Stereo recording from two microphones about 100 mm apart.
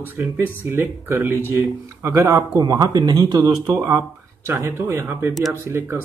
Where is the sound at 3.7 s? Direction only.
20° right (ahead or behind).